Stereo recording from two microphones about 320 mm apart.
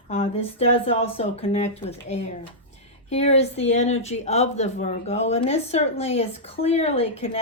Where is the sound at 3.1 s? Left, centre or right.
Centre.